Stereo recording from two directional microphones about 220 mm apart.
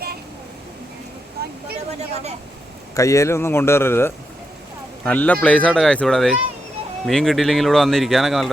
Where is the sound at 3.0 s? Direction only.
15° left (ahead or behind).